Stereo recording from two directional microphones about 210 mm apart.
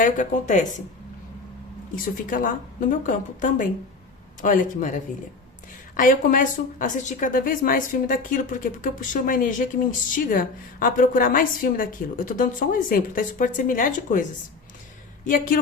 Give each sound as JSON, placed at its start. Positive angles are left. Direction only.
{"t": 0.0, "sound": "a woman's voice", "side_deg": 35}
{"t": 2.2, "sound": "a woman's voice", "side_deg": 40}